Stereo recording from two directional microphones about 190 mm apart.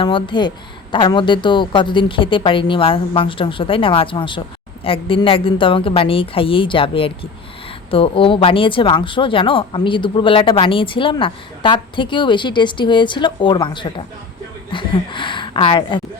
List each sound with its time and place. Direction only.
0.0 s a woman's voice: 25° left (ahead or behind)